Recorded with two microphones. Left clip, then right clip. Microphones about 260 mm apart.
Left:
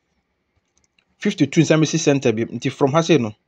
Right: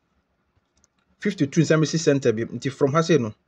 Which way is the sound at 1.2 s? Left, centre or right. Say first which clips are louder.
Left 4 dB; centre.